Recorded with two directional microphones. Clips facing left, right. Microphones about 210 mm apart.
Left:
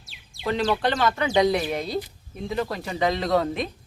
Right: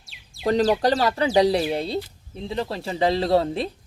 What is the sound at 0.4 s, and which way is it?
Speech, 40° right (ahead or behind).